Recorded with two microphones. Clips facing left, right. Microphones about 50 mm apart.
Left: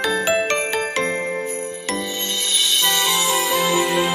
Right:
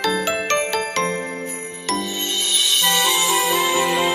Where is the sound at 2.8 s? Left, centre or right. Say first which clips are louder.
Right 2 dB; centre.